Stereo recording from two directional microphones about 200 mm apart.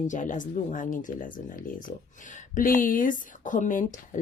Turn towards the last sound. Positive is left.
turn(degrees=40)  # may be behind; listen again after turning